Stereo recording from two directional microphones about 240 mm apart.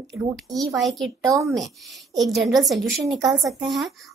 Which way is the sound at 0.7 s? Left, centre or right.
Centre.